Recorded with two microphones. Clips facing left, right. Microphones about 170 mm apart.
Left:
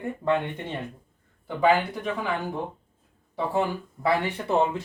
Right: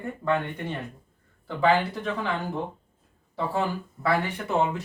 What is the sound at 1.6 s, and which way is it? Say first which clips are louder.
Speech: left 1 dB; 10° left (ahead or behind).